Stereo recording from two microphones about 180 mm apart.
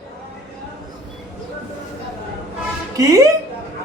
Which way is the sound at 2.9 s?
20° right (ahead or behind).